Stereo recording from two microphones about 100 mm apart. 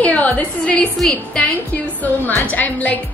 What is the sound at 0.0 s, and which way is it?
Speech, 15° left (ahead or behind).